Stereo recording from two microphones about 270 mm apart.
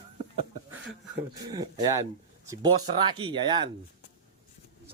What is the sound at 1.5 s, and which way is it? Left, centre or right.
Speech, centre.